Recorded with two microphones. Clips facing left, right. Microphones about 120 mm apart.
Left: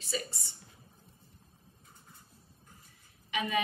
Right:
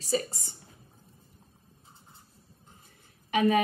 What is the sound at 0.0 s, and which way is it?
Speech, 40° right (ahead or behind).